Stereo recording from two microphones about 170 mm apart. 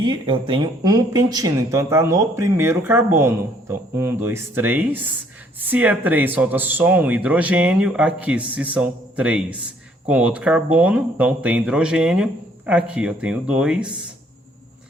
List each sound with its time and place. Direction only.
0.0 s speech: 25° right (ahead or behind); by 13.9 s 5° right (ahead or behind)